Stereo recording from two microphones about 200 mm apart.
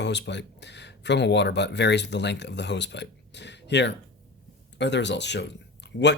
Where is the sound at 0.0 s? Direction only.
60° left (ahead or behind).